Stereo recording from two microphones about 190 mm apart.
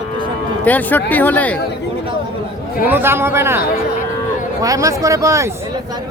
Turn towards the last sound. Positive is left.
turn(degrees=-15)  # may be behind; listen again after turning